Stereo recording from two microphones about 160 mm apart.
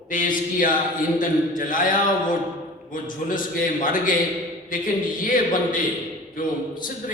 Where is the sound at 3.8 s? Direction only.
55° left (ahead or behind).